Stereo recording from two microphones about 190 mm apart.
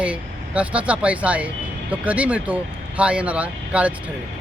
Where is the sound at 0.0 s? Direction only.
5° right (ahead or behind).